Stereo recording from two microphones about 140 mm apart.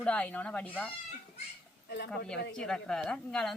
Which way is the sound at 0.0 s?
10° left (ahead or behind).